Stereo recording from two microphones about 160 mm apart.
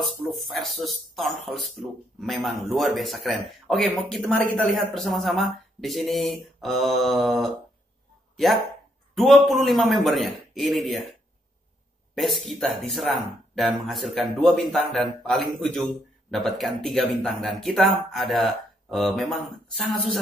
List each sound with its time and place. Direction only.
0.3 s speech: centre (ahead or behind)
9.1 s speech: centre (ahead or behind)
12.2 s speech: centre (ahead or behind)